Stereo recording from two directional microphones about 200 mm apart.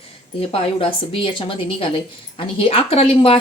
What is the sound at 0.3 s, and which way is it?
A woman's voice, 25° left (ahead or behind).